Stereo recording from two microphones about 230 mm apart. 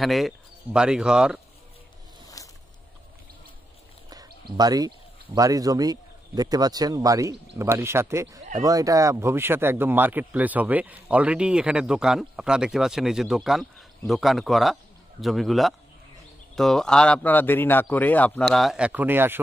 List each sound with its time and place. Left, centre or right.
0.0 s speech: centre
2.4 s a sound: centre
4.1 s speech: centre